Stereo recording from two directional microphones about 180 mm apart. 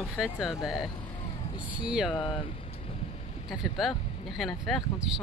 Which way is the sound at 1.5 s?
25° left (ahead or behind).